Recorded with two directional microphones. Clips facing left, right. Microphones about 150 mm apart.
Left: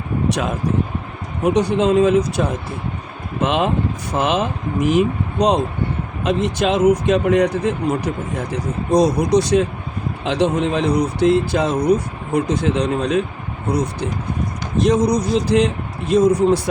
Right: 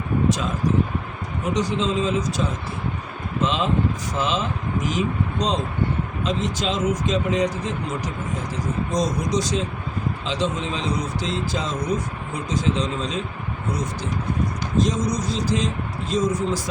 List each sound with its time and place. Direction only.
0.3 s speech: 65° left (ahead or behind)
14.8 s speech: 65° left (ahead or behind)